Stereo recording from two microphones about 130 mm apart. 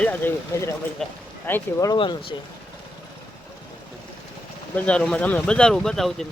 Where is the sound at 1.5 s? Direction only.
15° left (ahead or behind).